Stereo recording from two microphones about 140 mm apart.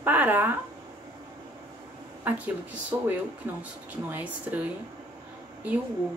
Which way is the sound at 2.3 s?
10° right (ahead or behind).